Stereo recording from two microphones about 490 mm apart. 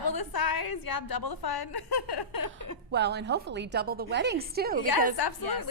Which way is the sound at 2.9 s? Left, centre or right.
Centre.